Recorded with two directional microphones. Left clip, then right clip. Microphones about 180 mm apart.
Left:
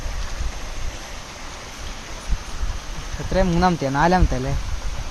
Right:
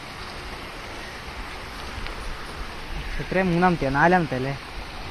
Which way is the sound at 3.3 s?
40° left (ahead or behind).